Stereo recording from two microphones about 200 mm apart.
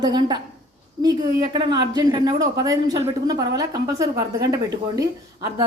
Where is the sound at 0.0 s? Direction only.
20° right (ahead or behind).